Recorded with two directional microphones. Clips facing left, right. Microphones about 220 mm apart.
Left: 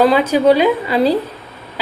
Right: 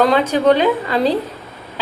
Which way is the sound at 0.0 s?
5° left (ahead or behind).